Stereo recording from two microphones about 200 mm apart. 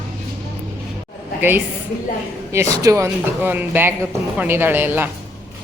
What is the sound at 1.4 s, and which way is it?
A woman's voice, 10° right (ahead or behind).